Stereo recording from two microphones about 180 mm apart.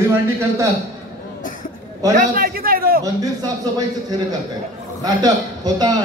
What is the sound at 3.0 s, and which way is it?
Speech, 20° right (ahead or behind).